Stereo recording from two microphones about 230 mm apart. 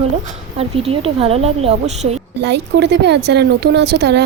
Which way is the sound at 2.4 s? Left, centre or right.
Right.